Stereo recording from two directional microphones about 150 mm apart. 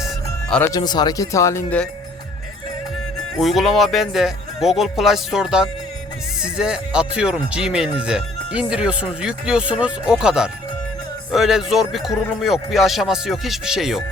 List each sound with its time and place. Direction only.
0.6 s speech: 25° left (ahead or behind)
3.3 s speech: centre (ahead or behind)